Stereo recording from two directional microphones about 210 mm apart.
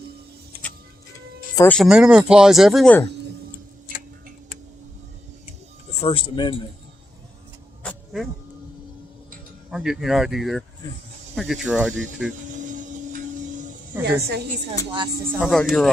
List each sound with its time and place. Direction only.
1.5 s speech: 5° left (ahead or behind)
6.0 s speech: 25° left (ahead or behind)
7.9 s music: centre (ahead or behind)
9.6 s speech: 5° right (ahead or behind)
14.0 s a woman's voice: 50° right (ahead or behind)
15.4 s speech: centre (ahead or behind)